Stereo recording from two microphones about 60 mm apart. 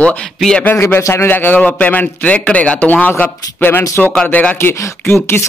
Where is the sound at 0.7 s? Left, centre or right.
Left.